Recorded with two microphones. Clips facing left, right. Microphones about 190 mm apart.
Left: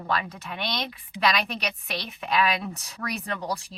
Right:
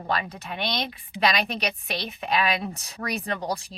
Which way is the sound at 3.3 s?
35° right (ahead or behind).